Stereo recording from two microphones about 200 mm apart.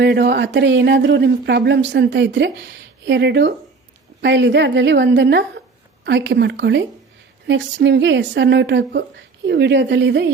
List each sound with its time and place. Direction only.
0.0 s a woman's voice: 60° right (ahead or behind)